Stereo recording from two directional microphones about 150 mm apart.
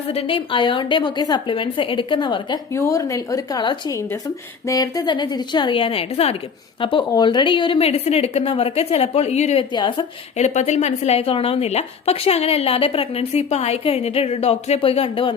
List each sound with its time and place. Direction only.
0.1 s a woman's voice: 40° left (ahead or behind)
7.1 s a woman's voice: 30° left (ahead or behind); by 9.6 s 50° left (ahead or behind)
9.7 s a woman's voice: 30° left (ahead or behind)
10.3 s a woman's voice: 50° left (ahead or behind)